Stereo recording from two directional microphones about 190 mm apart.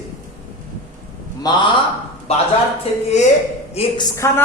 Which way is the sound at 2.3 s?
30° left (ahead or behind).